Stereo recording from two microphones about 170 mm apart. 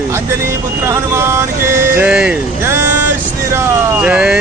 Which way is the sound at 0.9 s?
15° right (ahead or behind).